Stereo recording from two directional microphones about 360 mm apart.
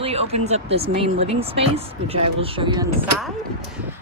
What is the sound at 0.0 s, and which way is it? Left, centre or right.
A woman's voice, centre.